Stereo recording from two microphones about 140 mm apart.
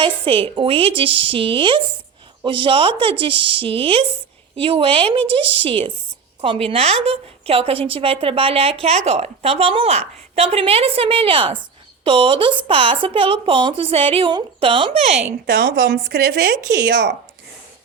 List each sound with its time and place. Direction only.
0.0 s a woman's voice: 40° right (ahead or behind)
15.4 s speech: 90° right